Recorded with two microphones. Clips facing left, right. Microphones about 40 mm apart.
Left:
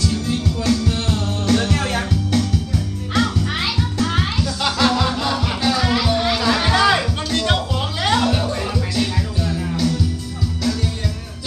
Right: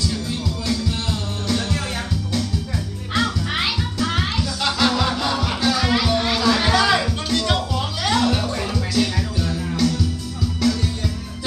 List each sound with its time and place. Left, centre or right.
0.3 s music: left
3.2 s music: centre
4.6 s music: centre
6.4 s music: centre
8.3 s music: centre